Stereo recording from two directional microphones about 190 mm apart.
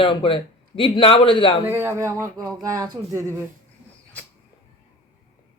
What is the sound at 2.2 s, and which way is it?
Speech, 20° right (ahead or behind).